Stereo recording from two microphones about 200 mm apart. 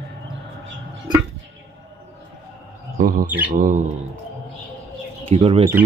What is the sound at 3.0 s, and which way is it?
Bird, 45° right (ahead or behind).